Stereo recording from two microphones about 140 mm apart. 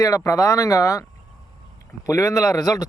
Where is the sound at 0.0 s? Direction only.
25° left (ahead or behind).